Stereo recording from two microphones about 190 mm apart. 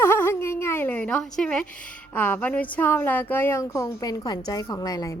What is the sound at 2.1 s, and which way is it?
A woman's voice, 10° left (ahead or behind).